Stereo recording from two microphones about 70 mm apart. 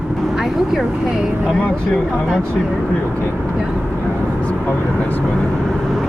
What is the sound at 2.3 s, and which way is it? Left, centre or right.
Speech, centre.